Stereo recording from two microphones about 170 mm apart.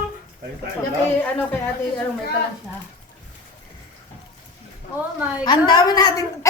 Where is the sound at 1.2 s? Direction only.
10° left (ahead or behind).